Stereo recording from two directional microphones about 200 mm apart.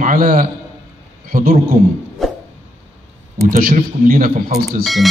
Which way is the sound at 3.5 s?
45° right (ahead or behind).